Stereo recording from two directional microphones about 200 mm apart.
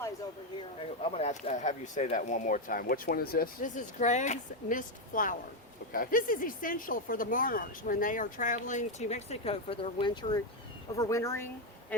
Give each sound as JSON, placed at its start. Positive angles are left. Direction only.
{"t": 1.0, "sound": "speech", "side_deg": 30}